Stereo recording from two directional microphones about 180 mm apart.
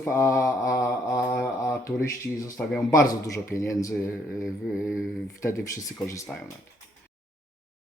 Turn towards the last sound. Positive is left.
turn(degrees=15)  # may be behind; listen again after turning